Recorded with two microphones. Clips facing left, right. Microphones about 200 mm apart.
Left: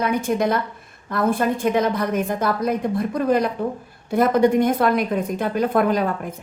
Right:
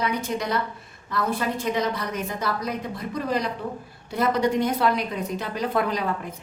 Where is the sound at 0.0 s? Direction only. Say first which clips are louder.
Left 6 dB; 50° left (ahead or behind).